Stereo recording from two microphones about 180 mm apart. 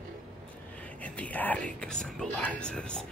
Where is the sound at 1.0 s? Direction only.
5° left (ahead or behind).